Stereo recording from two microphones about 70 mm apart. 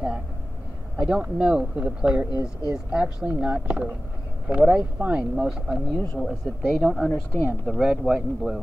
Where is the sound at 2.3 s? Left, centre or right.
Left.